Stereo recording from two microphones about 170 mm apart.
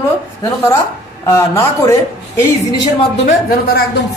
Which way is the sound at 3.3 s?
60° left (ahead or behind).